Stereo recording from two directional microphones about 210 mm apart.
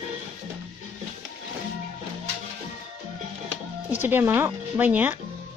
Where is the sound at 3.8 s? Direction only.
10° right (ahead or behind).